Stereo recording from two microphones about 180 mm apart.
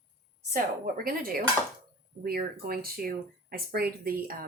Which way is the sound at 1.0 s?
55° right (ahead or behind).